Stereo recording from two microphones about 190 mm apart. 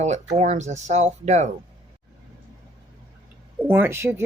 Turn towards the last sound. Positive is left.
turn(degrees=-15)  # may be behind; listen again after turning